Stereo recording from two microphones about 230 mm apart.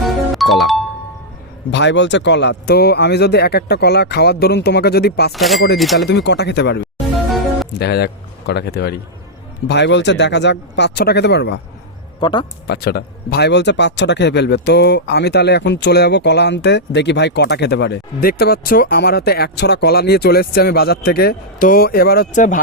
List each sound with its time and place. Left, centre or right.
0.0 s music: centre
1.7 s speech: left
5.3 s speech: centre
6.1 s speech: left
7.3 s music: centre
7.7 s a man's voice: left
12.2 s speech: centre
12.6 s speech: left